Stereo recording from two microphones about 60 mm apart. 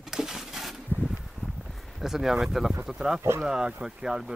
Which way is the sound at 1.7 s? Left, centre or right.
Centre.